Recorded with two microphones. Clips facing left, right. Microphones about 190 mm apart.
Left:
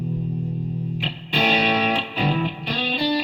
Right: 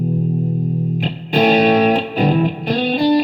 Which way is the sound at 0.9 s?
45° right (ahead or behind).